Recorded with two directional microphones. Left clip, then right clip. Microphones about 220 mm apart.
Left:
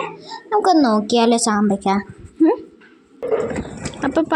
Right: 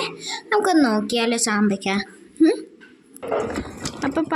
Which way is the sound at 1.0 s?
25° left (ahead or behind).